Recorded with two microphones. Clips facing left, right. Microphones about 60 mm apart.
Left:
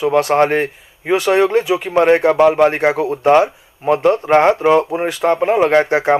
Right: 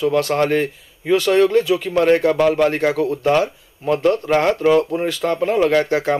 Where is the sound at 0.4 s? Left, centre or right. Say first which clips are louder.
Left 3 dB; left.